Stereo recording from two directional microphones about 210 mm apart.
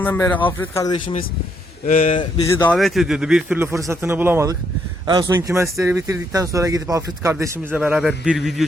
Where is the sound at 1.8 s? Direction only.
35° left (ahead or behind).